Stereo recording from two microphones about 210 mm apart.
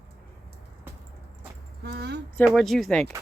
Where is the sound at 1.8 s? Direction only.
50° right (ahead or behind).